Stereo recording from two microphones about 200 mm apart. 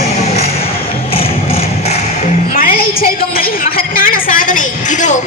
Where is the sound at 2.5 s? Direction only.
45° left (ahead or behind).